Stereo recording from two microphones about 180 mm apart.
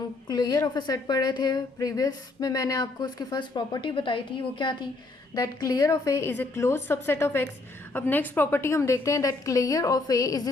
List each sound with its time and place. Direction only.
0.3 s a woman's voice: 20° left (ahead or behind)